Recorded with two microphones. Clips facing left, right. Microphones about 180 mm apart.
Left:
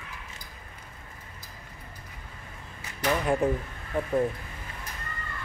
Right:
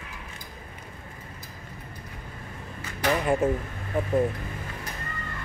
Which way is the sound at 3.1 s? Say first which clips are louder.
Right 1 dB; centre (ahead or behind).